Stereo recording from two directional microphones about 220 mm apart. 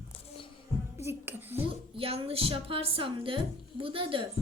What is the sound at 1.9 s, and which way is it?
A woman's voice, 25° right (ahead or behind).